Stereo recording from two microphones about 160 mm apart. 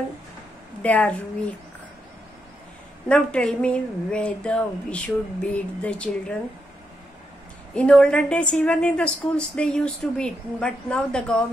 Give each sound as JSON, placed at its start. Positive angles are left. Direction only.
{"t": 0.8, "sound": "speech", "side_deg": 10}
{"t": 3.1, "sound": "speech", "side_deg": 5}
{"t": 7.7, "sound": "a woman's voice", "side_deg": 5}